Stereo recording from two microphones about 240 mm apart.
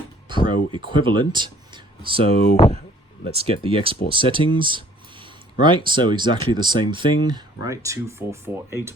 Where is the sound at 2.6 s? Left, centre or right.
Left.